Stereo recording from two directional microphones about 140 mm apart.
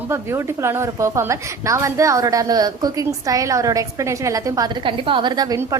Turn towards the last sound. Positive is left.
turn(degrees=-30)  # may be behind; listen again after turning